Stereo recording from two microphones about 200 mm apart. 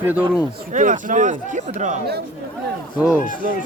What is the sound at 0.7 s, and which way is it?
A man's voice, 40° right (ahead or behind).